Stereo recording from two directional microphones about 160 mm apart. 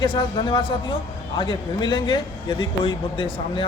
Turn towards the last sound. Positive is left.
turn(degrees=30)  # may be behind; listen again after turning